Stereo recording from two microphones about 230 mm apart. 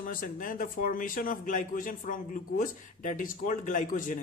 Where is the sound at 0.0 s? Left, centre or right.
Left.